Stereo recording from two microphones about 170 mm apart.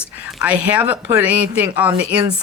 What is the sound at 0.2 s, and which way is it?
A woman's voice, 5° right (ahead or behind).